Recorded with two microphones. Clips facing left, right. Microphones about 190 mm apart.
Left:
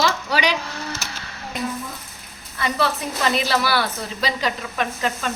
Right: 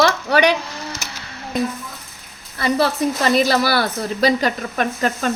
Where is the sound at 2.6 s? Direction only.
40° right (ahead or behind).